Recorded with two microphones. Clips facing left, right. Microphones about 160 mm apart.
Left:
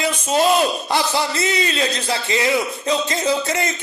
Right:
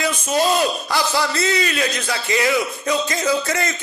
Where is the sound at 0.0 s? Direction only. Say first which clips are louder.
Left 1 dB; 25° left (ahead or behind).